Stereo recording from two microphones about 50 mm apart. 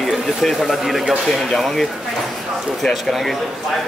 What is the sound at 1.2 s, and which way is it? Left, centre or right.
Speech, centre.